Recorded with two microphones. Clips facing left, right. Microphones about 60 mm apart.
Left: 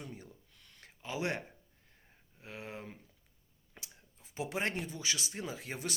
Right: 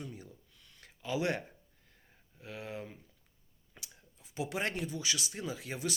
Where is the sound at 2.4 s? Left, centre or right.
Left.